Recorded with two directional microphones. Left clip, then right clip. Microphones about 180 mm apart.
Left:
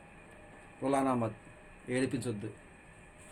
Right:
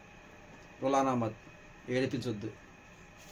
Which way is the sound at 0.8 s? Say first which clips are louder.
Right 1 dB; 20° left (ahead or behind).